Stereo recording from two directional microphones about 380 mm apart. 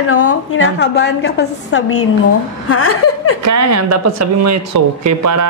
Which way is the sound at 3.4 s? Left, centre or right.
Right.